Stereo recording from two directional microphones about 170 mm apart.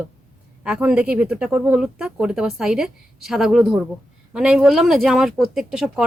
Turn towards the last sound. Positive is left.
turn(degrees=-5)  # may be behind; listen again after turning